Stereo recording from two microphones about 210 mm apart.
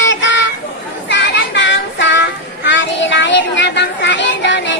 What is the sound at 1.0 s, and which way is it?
Child singing, 55° left (ahead or behind).